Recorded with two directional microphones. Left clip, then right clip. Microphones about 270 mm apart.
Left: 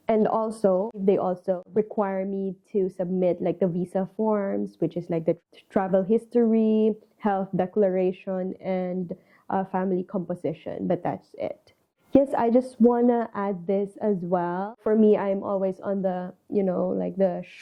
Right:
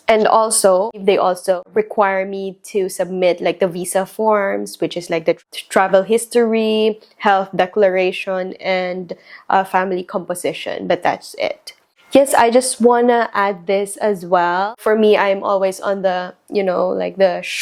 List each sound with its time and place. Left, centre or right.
0.0 s speech: centre
0.7 s speech: right
1.0 s speech: centre
16.7 s speech: right
17.0 s speech: centre